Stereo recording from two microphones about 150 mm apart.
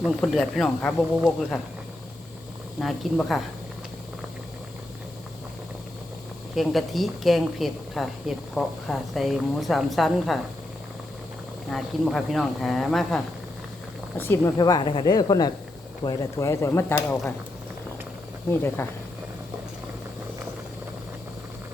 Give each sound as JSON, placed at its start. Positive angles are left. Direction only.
{"t": 0.0, "sound": "speech", "side_deg": 0}
{"t": 2.8, "sound": "speech", "side_deg": 0}
{"t": 6.6, "sound": "speech", "side_deg": 0}
{"t": 11.7, "sound": "speech", "side_deg": 0}
{"t": 14.2, "sound": "speech", "side_deg": 15}
{"t": 14.6, "sound": "speech", "side_deg": 30}